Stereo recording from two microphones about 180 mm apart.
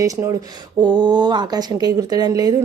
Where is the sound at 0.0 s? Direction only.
15° right (ahead or behind).